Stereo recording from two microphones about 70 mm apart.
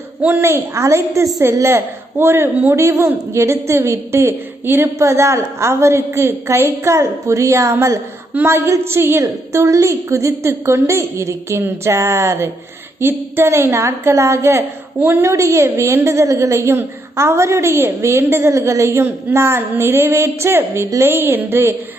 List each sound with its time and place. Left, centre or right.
0.2 s a woman's voice: right
0.4 s a woman's voice: right
9.2 s a woman's voice: right